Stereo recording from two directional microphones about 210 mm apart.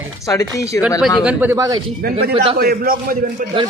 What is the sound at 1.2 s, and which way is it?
Speech, 5° right (ahead or behind).